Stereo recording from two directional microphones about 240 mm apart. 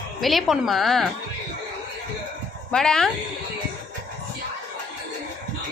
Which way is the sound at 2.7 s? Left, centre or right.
Centre.